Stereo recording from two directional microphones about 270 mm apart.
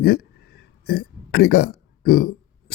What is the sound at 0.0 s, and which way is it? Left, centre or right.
A man's voice, left.